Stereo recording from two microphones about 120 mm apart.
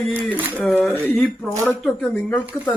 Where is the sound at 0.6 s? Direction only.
10° left (ahead or behind).